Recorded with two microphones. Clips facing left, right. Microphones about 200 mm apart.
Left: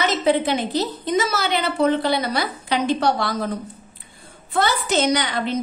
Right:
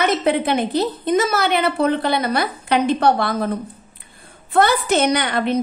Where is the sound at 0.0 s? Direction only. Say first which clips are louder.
Right 1 dB; 55° right (ahead or behind).